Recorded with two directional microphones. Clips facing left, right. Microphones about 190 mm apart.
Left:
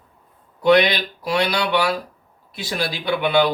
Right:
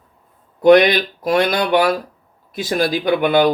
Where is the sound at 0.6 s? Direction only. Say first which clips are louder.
Right 5 dB; 45° right (ahead or behind).